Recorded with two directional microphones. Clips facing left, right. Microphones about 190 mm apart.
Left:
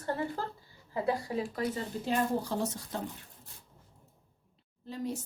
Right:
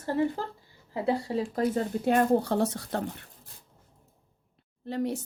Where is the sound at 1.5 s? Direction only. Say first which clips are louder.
Right 7 dB; 55° right (ahead or behind).